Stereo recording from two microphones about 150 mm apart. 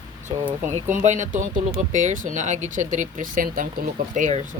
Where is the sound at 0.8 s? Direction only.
55° right (ahead or behind).